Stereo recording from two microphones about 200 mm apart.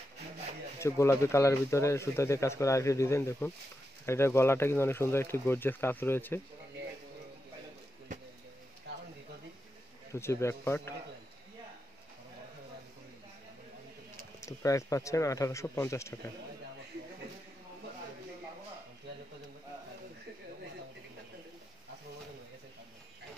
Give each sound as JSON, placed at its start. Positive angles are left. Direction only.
{"t": 0.7, "sound": "speech", "side_deg": 15}
{"t": 10.1, "sound": "speech", "side_deg": 15}
{"t": 14.4, "sound": "speech", "side_deg": 15}